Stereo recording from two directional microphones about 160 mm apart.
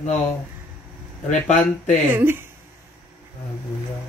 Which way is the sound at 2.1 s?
15° right (ahead or behind).